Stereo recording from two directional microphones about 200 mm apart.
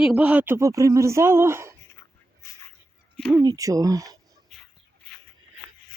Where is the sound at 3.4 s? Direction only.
15° right (ahead or behind).